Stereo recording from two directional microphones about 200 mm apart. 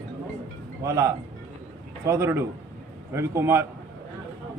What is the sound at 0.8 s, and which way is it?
A man's voice, 15° right (ahead or behind).